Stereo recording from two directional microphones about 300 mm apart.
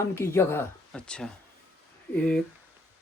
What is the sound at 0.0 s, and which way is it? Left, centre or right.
Speech, centre.